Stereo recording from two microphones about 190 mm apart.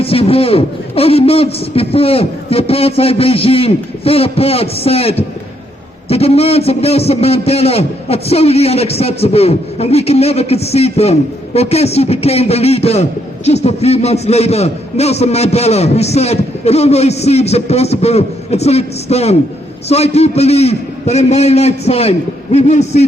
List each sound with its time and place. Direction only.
0.0 s a man's voice: 30° left (ahead or behind)